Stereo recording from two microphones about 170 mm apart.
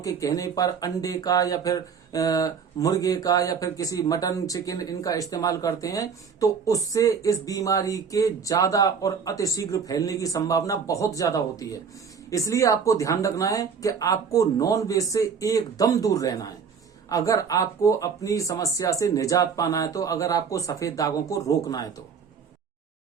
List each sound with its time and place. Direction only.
0.0 s speech: 20° left (ahead or behind)